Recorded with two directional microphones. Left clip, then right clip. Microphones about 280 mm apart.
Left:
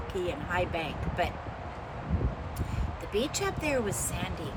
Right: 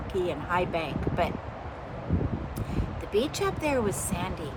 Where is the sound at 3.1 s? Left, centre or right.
Centre.